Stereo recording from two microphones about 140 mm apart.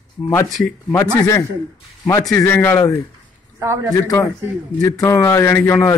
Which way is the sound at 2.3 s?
15° left (ahead or behind).